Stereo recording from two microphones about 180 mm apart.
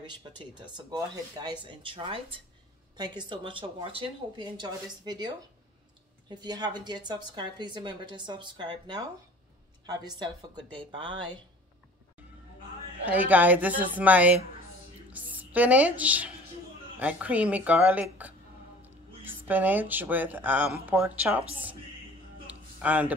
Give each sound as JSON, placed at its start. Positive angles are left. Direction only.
{"t": 0.0, "sound": "speech", "side_deg": -25}
{"t": 13.0, "sound": "a woman's voice", "side_deg": -10}
{"t": 22.5, "sound": "a sound", "side_deg": -10}